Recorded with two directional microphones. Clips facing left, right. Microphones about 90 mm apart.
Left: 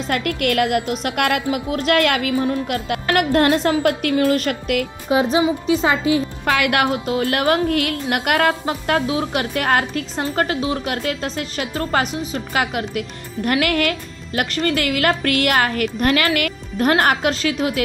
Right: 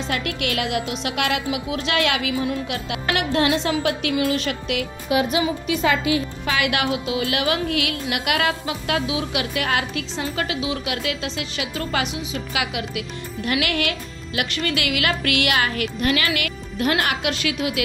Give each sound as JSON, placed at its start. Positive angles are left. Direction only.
{"t": 0.1, "sound": "a woman's voice", "side_deg": 50}
{"t": 5.1, "sound": "a woman's voice", "side_deg": 30}
{"t": 6.4, "sound": "a woman's voice", "side_deg": 50}